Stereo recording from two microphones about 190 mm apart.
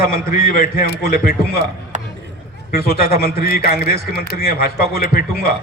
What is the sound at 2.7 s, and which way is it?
Speech, 55° left (ahead or behind).